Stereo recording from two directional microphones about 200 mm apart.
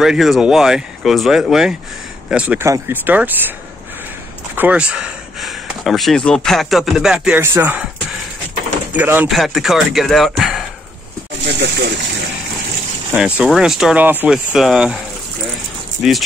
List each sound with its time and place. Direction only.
0.0 s speech: centre (ahead or behind)
4.6 s speech: 5° right (ahead or behind)
8.9 s speech: 10° right (ahead or behind)
11.4 s a sound: 60° right (ahead or behind)
13.1 s speech: 5° right (ahead or behind)
16.0 s speech: centre (ahead or behind)